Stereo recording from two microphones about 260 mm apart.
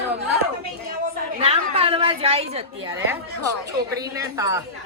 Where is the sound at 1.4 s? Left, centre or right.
Right.